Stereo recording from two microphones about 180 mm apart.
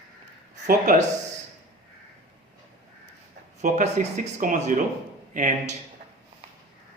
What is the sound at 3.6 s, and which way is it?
Speech, 40° right (ahead or behind).